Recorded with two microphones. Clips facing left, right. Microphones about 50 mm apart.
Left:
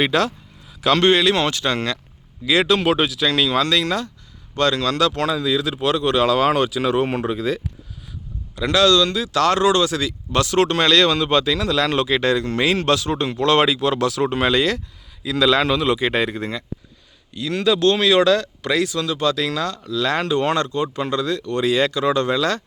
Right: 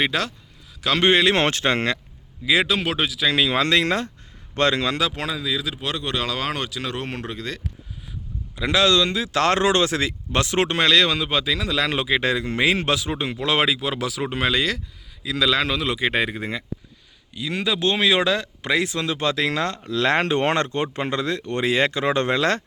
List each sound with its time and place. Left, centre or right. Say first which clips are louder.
0.0 s speech: left 4 dB; centre
0.9 s speech: left 1 dB; centre
1.4 s speech: even; right
2.4 s speech: left 3 dB; centre
3.3 s speech: even; right
4.9 s speech: left 5 dB; centre
8.5 s speech: left 3 dB; centre; by 22.6 s right